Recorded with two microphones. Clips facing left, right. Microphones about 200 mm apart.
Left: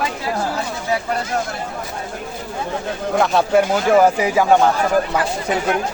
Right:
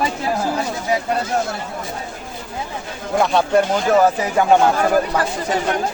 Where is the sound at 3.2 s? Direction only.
5° left (ahead or behind).